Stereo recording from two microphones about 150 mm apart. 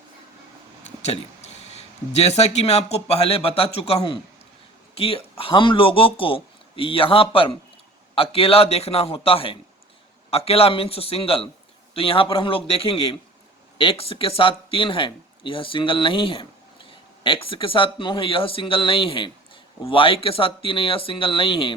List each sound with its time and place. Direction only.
0.9 s speech: 45° left (ahead or behind)